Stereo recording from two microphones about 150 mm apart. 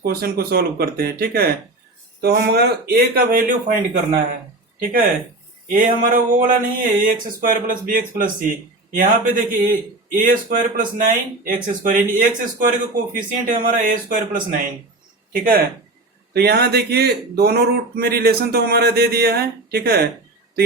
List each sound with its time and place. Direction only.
0.0 s speech: 90° right; by 3.8 s 75° right (ahead or behind)
4.8 s speech: 70° right (ahead or behind)
16.3 s speech: 90° right